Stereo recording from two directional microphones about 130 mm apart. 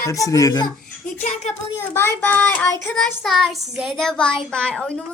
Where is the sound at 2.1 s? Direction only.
15° left (ahead or behind).